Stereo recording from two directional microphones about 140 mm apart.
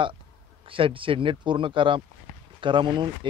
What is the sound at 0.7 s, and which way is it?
Speech, 40° right (ahead or behind).